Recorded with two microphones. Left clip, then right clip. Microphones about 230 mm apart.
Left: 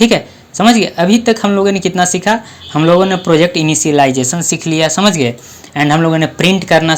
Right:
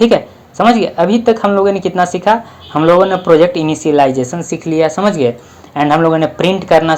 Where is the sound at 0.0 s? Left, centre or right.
Left.